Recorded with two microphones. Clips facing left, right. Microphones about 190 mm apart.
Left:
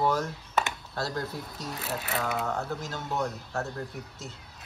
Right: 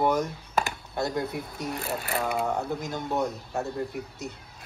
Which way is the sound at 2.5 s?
15° right (ahead or behind).